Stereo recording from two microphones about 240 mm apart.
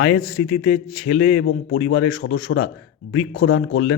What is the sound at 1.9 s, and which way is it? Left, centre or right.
Speech, left.